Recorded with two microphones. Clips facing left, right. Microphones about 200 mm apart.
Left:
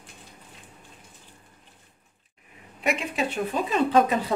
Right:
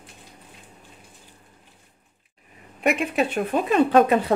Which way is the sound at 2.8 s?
60° right (ahead or behind).